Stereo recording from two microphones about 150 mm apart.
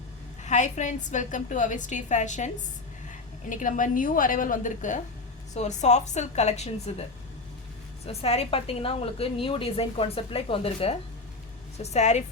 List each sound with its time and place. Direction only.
0.4 s a woman's voice: 55° left (ahead or behind)
3.5 s a woman's voice: 60° left (ahead or behind)
8.0 s a woman's voice: 45° left (ahead or behind)